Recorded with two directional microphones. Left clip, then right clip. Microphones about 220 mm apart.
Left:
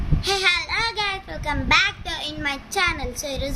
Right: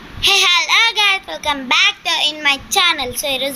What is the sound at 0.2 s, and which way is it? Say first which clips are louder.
A child's voice: right 8 dB; 10° left (ahead or behind).